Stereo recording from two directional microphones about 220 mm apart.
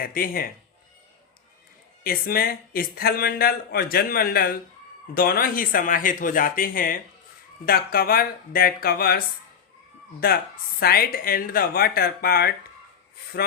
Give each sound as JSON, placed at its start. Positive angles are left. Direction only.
{"t": 0.0, "sound": "speech", "side_deg": 40}
{"t": 2.0, "sound": "speech", "side_deg": 45}